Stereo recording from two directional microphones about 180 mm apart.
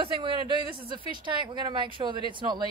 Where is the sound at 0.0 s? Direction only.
25° right (ahead or behind).